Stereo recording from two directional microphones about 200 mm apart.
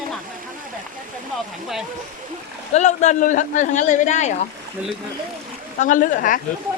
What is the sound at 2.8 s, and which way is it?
Speech, 35° left (ahead or behind).